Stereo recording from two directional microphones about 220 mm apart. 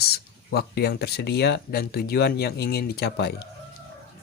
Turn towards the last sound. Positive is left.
turn(degrees=45)  # may be behind; listen again after turning